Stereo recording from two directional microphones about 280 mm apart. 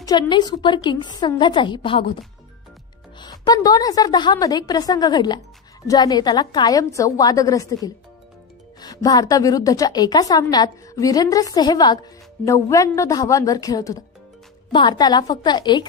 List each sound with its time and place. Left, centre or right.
0.0 s a woman's voice: centre
3.2 s a woman's voice: centre